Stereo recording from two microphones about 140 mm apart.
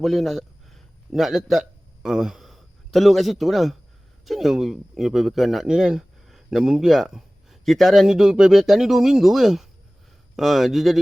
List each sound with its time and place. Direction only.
0.0 s a man's voice: centre (ahead or behind)